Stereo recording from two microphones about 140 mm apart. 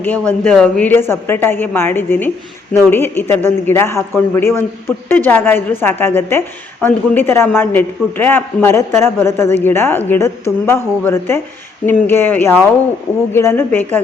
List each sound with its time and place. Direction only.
0.0 s a man's voice: 10° left (ahead or behind)